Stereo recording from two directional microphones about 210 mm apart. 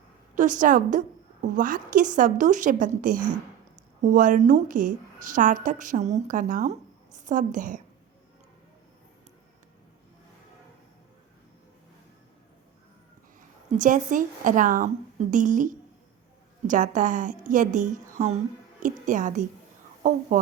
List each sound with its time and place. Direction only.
0.3 s a woman's voice: 35° right (ahead or behind)
13.7 s a woman's voice: 35° right (ahead or behind)